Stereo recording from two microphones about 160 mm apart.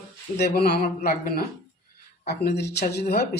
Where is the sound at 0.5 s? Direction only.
75° left (ahead or behind).